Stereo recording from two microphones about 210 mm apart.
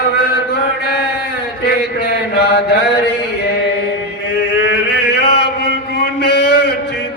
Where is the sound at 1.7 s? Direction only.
50° left (ahead or behind).